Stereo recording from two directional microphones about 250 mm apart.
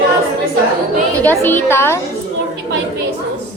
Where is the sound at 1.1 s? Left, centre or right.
Centre.